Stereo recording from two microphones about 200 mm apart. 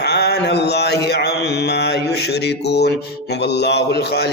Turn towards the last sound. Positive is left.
turn(degrees=55)  # may be behind; listen again after turning